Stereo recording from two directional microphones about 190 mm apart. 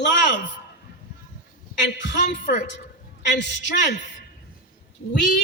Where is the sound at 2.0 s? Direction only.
65° left (ahead or behind).